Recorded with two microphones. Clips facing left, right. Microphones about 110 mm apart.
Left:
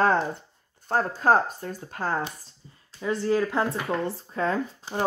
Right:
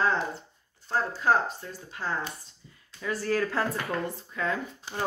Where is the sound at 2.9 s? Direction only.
25° left (ahead or behind).